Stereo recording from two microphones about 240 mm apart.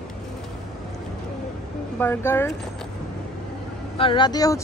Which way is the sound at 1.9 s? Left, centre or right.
Centre.